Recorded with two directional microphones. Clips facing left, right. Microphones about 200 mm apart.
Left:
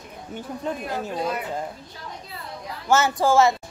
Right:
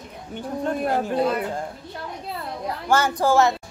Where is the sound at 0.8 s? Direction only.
55° right (ahead or behind).